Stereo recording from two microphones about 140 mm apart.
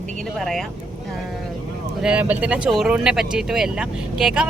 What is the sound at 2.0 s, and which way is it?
Speech, 10° right (ahead or behind).